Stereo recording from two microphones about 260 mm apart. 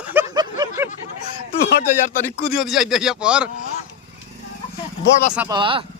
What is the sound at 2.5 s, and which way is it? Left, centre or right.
Speech, centre.